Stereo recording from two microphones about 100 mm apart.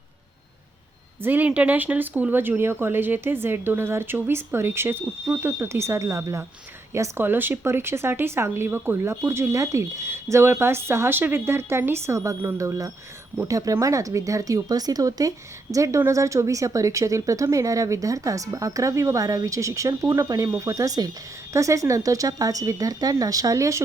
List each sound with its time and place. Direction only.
1.2 s a woman's voice: 20° right (ahead or behind)